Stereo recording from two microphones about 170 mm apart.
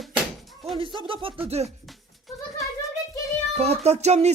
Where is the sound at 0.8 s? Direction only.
30° right (ahead or behind).